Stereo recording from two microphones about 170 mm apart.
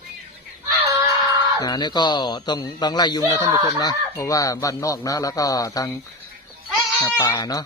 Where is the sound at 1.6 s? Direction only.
25° left (ahead or behind).